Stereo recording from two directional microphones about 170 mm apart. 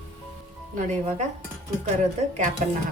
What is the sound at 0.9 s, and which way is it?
Speech, 40° right (ahead or behind).